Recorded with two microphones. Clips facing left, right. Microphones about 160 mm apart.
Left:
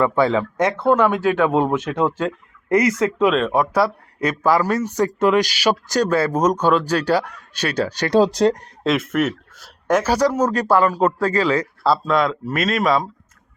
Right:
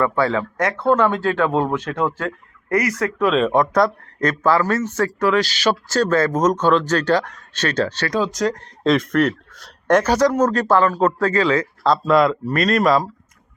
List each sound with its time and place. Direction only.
0.0 s speech: 15° left (ahead or behind)
3.3 s speech: centre (ahead or behind)
8.1 s speech: 30° left (ahead or behind)
8.8 s speech: 5° left (ahead or behind)